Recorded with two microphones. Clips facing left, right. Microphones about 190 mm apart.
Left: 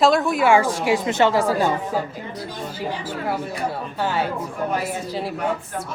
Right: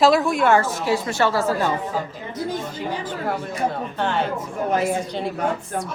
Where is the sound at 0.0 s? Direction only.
Centre (ahead or behind).